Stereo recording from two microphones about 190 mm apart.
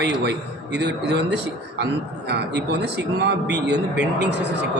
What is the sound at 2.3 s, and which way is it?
Speech, 60° right (ahead or behind).